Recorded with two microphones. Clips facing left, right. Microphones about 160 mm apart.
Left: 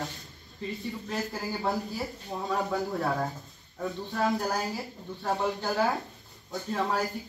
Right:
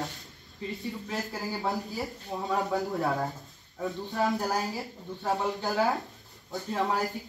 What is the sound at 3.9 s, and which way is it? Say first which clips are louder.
Speech: right 3 dB; 20° right (ahead or behind).